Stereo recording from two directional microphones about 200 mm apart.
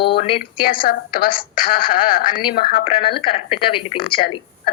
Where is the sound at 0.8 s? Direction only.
50° left (ahead or behind).